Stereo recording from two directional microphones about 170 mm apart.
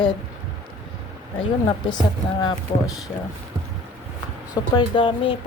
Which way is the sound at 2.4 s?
25° left (ahead or behind).